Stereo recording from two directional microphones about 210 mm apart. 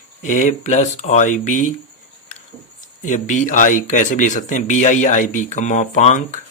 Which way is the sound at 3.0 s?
35° left (ahead or behind).